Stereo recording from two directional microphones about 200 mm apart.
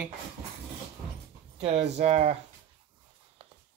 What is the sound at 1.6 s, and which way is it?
Speech, 30° right (ahead or behind).